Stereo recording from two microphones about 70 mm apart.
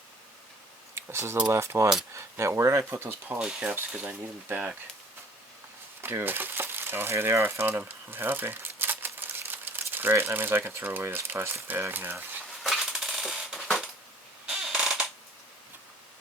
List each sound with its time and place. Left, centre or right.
0.9 s speech: right
3.3 s speech: centre
4.4 s speech: right
6.0 s speech: right
12.6 s coin: centre
14.4 s a sound: centre